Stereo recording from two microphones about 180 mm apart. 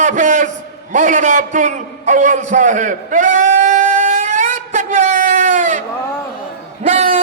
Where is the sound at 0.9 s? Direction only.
45° right (ahead or behind).